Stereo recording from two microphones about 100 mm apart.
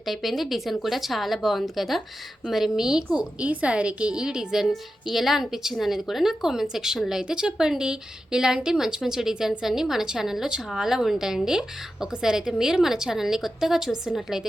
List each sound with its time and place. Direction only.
0.0 s a woman's voice: centre (ahead or behind)